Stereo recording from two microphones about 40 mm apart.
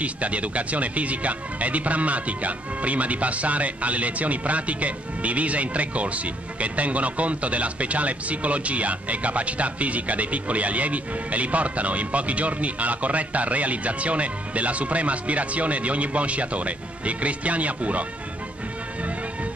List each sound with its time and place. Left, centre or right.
0.0 s speech: right